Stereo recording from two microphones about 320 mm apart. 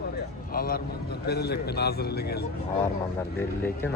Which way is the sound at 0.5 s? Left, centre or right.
Left.